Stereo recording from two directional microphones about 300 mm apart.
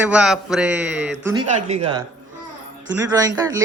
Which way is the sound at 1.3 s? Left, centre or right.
Centre.